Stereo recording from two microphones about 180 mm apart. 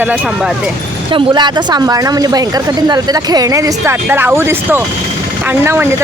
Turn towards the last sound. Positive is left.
turn(degrees=-10)  # may be behind; listen again after turning